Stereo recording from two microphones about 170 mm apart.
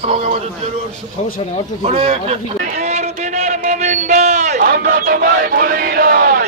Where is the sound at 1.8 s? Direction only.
35° right (ahead or behind).